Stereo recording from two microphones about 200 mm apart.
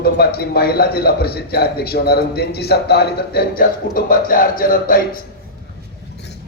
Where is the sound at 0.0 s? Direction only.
50° left (ahead or behind).